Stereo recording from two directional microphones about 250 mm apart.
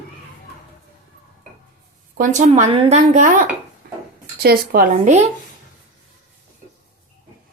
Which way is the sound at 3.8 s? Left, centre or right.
Right.